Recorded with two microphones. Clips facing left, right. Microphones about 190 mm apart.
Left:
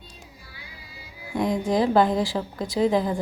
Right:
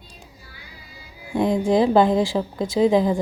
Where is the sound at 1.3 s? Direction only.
30° right (ahead or behind).